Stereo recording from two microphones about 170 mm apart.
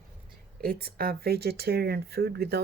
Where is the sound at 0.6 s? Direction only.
65° right (ahead or behind).